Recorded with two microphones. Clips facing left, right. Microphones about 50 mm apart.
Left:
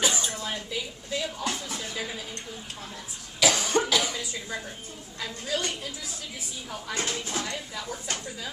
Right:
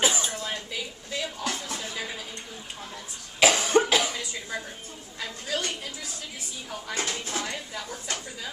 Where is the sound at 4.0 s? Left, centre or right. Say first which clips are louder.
Right 1 dB; centre.